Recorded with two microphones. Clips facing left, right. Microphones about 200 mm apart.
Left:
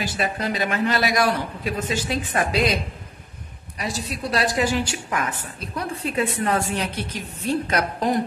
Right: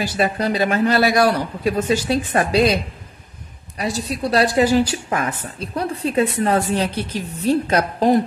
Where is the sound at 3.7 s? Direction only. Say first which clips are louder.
Right 5 dB; 35° right (ahead or behind).